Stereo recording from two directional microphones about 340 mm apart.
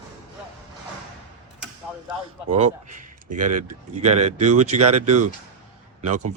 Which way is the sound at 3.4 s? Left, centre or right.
Right.